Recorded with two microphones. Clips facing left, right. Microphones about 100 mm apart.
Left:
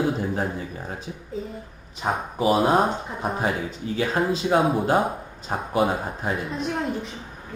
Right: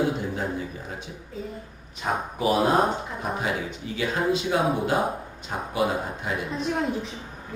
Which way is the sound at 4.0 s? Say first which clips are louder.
Left 1 dB; 35° left (ahead or behind).